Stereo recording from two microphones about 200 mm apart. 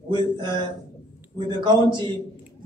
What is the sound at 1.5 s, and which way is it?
Speech, 20° right (ahead or behind).